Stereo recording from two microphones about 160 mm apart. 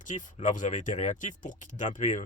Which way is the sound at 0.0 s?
50° left (ahead or behind).